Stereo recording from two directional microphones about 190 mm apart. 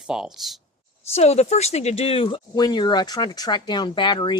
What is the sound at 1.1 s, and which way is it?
Speech, 35° left (ahead or behind).